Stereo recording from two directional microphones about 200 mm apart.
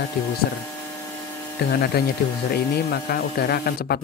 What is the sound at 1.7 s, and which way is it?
Speech, 50° left (ahead or behind).